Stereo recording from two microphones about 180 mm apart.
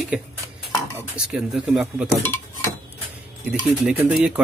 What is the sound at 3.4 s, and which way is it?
Speech, 5° right (ahead or behind).